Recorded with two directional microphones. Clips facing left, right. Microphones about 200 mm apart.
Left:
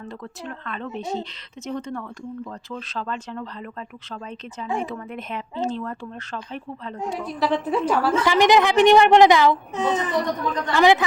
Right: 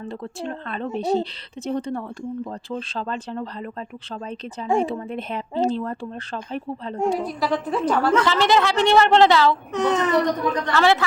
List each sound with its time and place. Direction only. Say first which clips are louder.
0.0 s speech: right 5 dB; 30° right (ahead or behind)
7.3 s a woman's voice: left 1 dB; 5° left (ahead or behind)
9.7 s a child's voice: right 3 dB; 70° right (ahead or behind)
10.8 s a woman's voice: left 3 dB; 15° left (ahead or behind)